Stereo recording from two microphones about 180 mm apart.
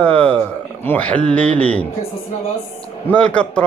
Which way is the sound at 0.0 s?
5° left (ahead or behind).